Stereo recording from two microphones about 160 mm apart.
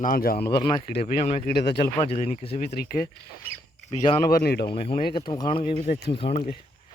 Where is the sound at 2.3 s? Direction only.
40° left (ahead or behind).